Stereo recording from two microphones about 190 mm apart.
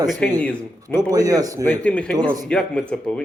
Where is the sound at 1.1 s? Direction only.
20° right (ahead or behind).